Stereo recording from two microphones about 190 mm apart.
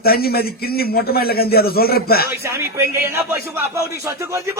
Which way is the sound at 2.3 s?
15° right (ahead or behind).